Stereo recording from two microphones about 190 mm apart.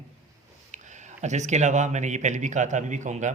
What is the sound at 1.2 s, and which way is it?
A man's voice, 40° right (ahead or behind).